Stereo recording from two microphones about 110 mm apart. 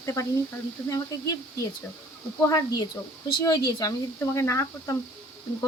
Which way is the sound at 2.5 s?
30° left (ahead or behind).